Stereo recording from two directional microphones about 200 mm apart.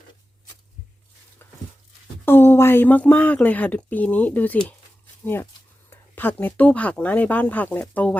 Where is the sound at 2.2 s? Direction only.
10° left (ahead or behind).